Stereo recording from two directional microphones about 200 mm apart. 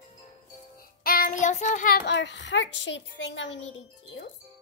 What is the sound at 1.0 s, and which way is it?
Child singing, 45° left (ahead or behind).